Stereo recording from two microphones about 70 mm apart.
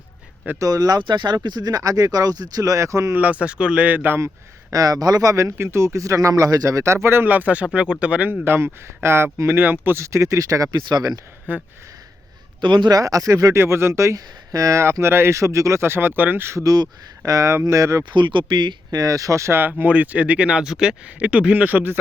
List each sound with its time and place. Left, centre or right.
0.6 s speech: right
3.2 s speech: centre
4.7 s speech: right
8.4 s speech: right
11.5 s speech: right
12.8 s speech: right
13.6 s speech: right
16.6 s speech: right
18.1 s speech: right
19.8 s speech: right